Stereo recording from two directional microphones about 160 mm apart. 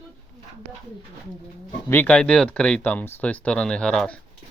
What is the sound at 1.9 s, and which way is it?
Speech, 10° left (ahead or behind).